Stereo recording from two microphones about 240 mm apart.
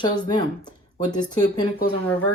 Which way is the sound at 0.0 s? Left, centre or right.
Centre.